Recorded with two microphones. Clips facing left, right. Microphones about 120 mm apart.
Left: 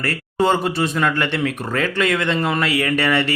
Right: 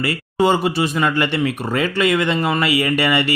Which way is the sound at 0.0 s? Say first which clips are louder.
Right 2 dB; 5° right (ahead or behind).